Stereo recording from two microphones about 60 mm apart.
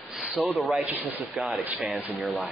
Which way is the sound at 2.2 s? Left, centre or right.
Centre.